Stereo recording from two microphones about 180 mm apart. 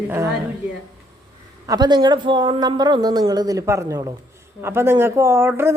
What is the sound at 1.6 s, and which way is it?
Speech, 20° right (ahead or behind).